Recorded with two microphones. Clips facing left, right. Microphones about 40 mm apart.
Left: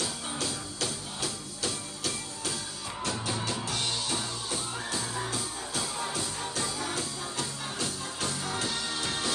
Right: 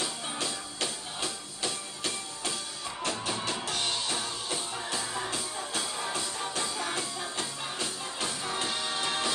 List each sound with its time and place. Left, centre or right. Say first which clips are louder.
0.0 s music: even; right